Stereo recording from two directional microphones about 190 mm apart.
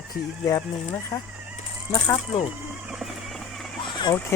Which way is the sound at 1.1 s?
20° left (ahead or behind).